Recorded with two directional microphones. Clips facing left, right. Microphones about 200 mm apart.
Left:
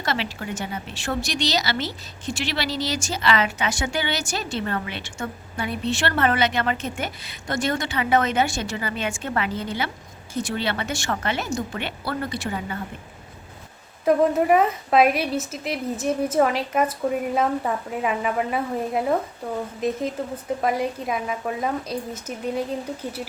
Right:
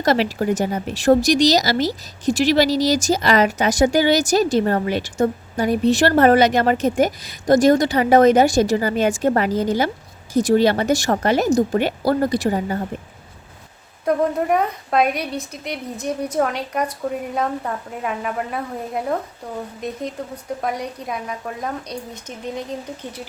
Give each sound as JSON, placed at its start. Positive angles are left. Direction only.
{"t": 0.0, "sound": "speech", "side_deg": -40}
{"t": 14.0, "sound": "a woman's voice", "side_deg": 5}